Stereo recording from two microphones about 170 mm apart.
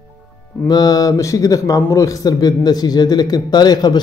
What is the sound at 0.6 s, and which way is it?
Speech, 20° left (ahead or behind).